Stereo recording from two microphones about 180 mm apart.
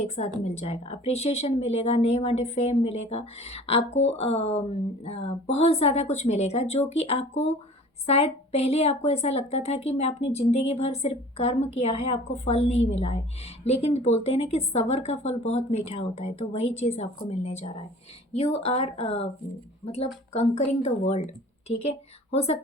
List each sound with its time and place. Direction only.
0.4 s a woman's voice: 35° left (ahead or behind)